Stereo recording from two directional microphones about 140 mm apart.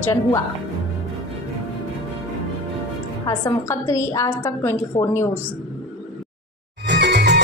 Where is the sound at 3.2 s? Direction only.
25° left (ahead or behind).